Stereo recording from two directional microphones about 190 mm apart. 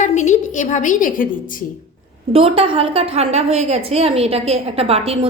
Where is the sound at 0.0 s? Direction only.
40° left (ahead or behind).